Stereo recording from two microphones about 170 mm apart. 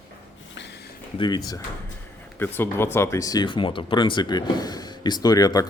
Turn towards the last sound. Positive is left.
turn(degrees=20)  # may be behind; listen again after turning